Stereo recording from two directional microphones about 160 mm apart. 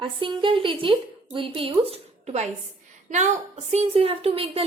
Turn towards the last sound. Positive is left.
turn(degrees=-35)  # may be behind; listen again after turning